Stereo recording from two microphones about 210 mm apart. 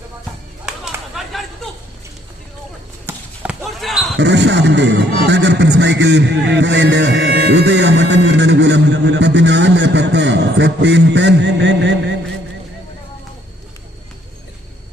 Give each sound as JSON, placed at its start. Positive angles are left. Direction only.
{"t": 0.6, "sound": "a sound", "side_deg": 0}
{"t": 3.1, "sound": "basketball bounce", "side_deg": -5}
{"t": 4.2, "sound": "a man's voice", "side_deg": -55}